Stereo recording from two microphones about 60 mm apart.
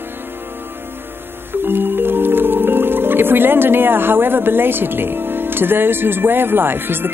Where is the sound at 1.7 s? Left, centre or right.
Right.